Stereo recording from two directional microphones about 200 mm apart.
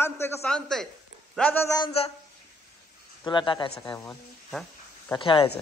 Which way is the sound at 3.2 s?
25° left (ahead or behind).